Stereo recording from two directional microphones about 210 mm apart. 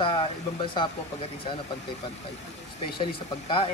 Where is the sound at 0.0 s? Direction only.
25° left (ahead or behind).